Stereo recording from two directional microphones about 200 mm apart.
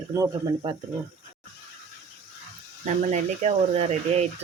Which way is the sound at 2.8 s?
35° right (ahead or behind).